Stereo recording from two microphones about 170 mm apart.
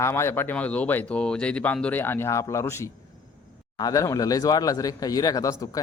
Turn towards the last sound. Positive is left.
turn(degrees=20)  # may be behind; listen again after turning